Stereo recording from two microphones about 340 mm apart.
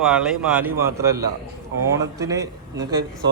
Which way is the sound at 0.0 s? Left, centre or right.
Centre.